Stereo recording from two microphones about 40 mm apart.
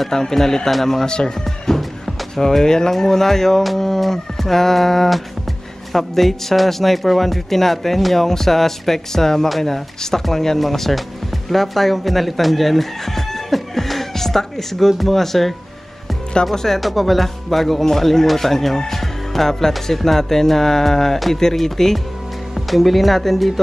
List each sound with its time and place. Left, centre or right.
0.1 s speech: centre
1.0 s speech: left
1.8 s speech: centre
16.5 s speech: centre